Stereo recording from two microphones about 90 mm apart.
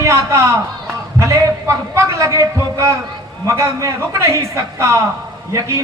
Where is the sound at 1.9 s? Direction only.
35° right (ahead or behind).